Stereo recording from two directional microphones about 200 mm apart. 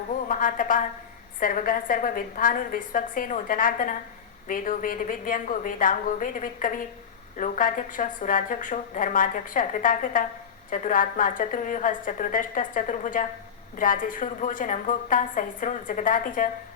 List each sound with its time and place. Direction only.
0.3 s a woman's voice: 40° left (ahead or behind)